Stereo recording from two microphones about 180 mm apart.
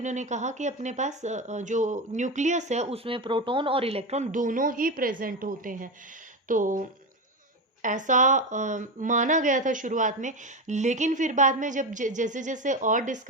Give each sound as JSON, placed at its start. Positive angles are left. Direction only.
{"t": 0.0, "sound": "speech", "side_deg": -40}